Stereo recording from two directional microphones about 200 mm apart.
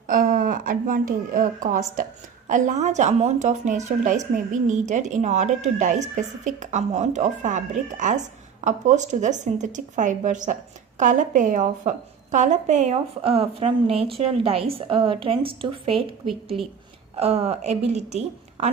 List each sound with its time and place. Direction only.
0.1 s a woman's voice: 45° right (ahead or behind)